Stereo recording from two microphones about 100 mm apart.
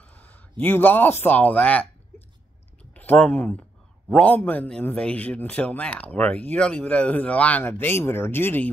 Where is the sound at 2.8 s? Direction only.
15° left (ahead or behind).